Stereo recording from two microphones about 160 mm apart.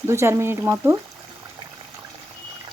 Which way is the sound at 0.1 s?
15° right (ahead or behind).